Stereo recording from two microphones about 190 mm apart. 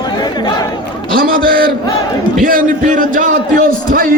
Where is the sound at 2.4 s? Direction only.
45° right (ahead or behind).